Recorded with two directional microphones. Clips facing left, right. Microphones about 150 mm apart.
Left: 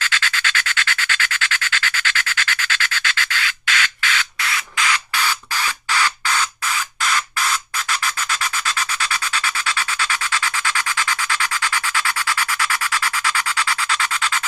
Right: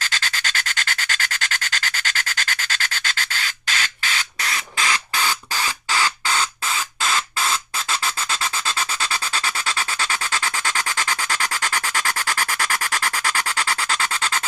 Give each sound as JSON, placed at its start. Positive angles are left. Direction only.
{"t": 0.0, "sound": "rub", "side_deg": -40}